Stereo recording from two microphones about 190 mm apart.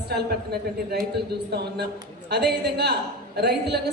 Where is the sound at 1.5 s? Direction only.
60° right (ahead or behind).